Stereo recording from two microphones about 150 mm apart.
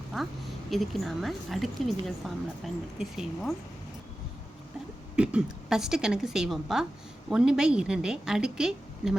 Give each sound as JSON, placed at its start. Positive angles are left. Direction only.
{"t": 0.7, "sound": "a woman's voice", "side_deg": 0}
{"t": 5.1, "sound": "a woman's voice", "side_deg": -5}